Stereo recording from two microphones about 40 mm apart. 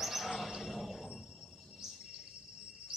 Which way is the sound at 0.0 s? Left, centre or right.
Centre.